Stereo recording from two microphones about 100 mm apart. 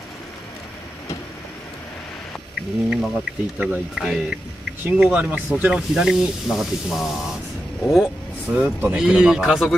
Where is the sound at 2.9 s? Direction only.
Centre (ahead or behind).